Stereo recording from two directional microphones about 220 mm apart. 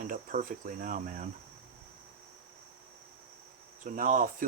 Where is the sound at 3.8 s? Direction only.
35° right (ahead or behind).